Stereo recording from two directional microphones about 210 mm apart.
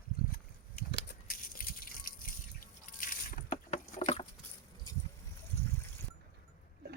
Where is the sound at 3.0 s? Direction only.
40° left (ahead or behind).